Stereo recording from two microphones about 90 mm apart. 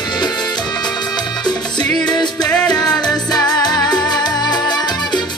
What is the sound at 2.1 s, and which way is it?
Music, 55° left (ahead or behind).